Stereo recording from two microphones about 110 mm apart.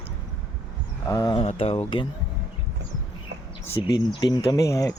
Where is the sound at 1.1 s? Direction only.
35° left (ahead or behind).